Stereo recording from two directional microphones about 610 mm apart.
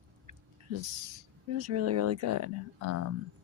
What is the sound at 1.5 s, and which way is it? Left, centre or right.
Speech, right.